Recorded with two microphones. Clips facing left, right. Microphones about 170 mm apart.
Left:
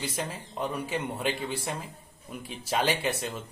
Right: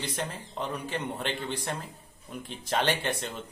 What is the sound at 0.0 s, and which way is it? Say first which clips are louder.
Speech: left 1 dB; 5° left (ahead or behind).